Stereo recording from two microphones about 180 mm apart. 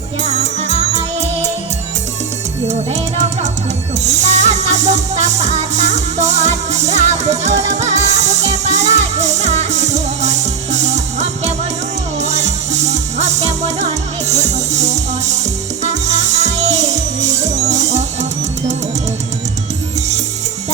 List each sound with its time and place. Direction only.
2.6 s speech: 40° right (ahead or behind)
4.3 s music: 40° right (ahead or behind)